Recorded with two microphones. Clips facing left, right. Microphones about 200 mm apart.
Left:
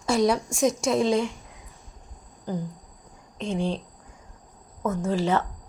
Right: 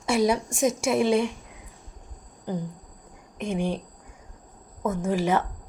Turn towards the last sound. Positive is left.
turn(degrees=-10)  # may be behind; listen again after turning